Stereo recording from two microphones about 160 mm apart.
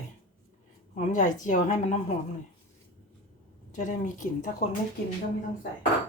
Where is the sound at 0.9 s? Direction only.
50° left (ahead or behind).